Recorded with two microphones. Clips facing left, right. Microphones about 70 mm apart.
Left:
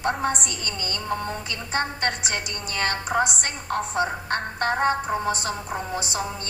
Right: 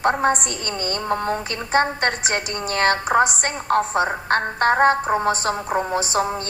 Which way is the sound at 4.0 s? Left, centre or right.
Right.